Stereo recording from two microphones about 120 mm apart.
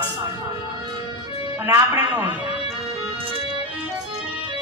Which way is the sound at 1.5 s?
15° right (ahead or behind).